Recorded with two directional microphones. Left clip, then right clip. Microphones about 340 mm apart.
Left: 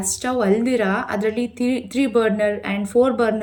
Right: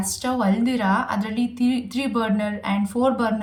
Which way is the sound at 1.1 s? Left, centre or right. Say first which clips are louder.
Left 4 dB; right.